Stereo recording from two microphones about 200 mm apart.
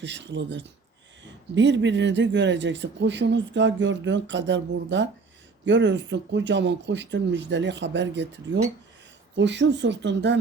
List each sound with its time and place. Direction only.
0.0 s speech: 65° right (ahead or behind)